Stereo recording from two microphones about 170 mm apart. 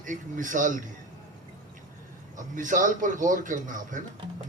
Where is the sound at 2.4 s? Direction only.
50° right (ahead or behind).